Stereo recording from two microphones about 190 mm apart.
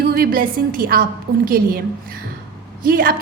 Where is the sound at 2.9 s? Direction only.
50° right (ahead or behind).